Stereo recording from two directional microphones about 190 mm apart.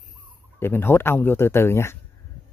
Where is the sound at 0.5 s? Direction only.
10° left (ahead or behind).